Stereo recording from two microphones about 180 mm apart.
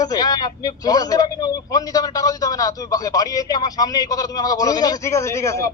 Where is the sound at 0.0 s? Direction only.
20° left (ahead or behind).